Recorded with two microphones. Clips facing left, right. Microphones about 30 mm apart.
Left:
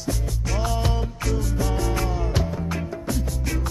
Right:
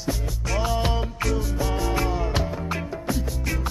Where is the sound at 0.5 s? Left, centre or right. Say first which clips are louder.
Right 2 dB; centre.